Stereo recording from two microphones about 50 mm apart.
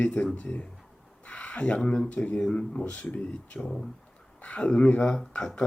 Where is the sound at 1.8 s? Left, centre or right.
Left.